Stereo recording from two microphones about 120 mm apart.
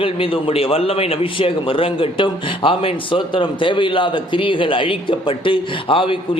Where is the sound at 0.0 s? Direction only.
50° left (ahead or behind).